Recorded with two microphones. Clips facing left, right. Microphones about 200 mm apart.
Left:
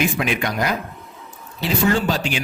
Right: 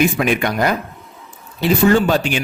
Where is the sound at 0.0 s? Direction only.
50° right (ahead or behind).